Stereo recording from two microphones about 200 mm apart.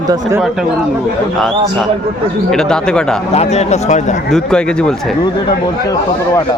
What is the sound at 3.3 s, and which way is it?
Speech, 30° left (ahead or behind).